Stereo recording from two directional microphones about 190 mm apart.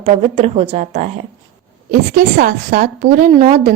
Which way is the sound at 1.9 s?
50° right (ahead or behind).